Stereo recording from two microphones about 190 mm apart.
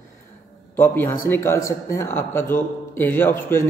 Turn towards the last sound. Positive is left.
turn(degrees=10)  # may be behind; listen again after turning